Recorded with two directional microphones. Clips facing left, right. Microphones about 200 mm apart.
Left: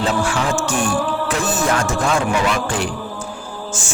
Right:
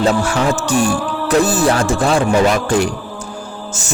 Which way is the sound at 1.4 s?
35° right (ahead or behind).